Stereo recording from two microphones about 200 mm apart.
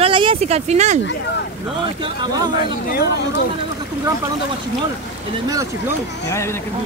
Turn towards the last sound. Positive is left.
turn(degrees=15)  # may be behind; listen again after turning